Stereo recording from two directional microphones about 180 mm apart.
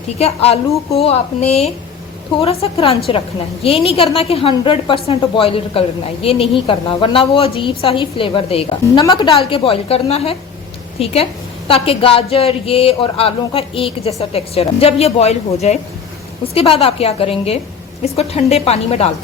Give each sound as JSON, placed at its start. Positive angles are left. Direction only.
{"t": 0.2, "sound": "a woman's voice", "side_deg": 35}